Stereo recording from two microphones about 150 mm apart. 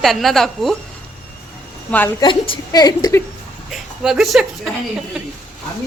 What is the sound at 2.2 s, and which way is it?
A woman's voice, 35° left (ahead or behind).